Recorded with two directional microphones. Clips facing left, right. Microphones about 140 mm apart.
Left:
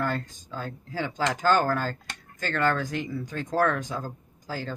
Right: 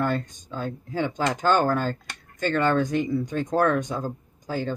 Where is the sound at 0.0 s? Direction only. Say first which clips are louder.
Right 4 dB; 15° right (ahead or behind).